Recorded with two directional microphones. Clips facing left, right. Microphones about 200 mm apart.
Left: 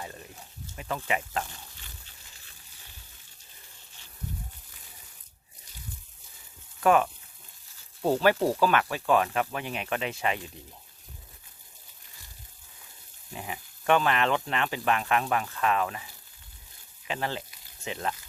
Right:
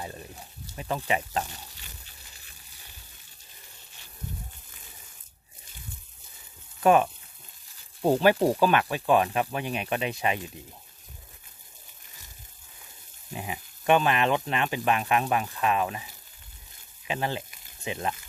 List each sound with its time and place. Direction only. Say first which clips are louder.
0.8 s speech: right 2 dB; 20° right (ahead or behind)
6.7 s speech: right 2 dB; 20° right (ahead or behind)
13.3 s speech: right 2 dB; 15° right (ahead or behind)